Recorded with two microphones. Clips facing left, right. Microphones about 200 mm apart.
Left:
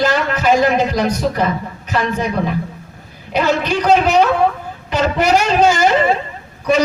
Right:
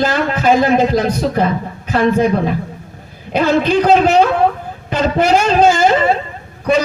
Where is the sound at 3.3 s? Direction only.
55° right (ahead or behind).